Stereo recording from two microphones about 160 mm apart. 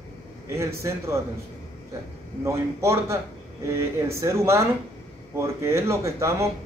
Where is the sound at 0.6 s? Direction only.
15° right (ahead or behind).